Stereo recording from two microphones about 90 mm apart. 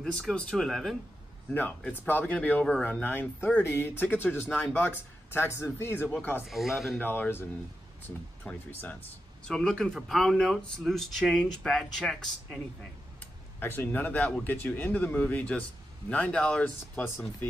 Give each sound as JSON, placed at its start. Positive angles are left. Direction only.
{"t": 0.0, "sound": "speech", "side_deg": 5}
{"t": 1.5, "sound": "speech", "side_deg": 20}
{"t": 6.4, "sound": "speech", "side_deg": 0}
{"t": 7.0, "sound": "speech", "side_deg": 20}
{"t": 8.5, "sound": "speech", "side_deg": 10}
{"t": 13.2, "sound": "speech", "side_deg": 20}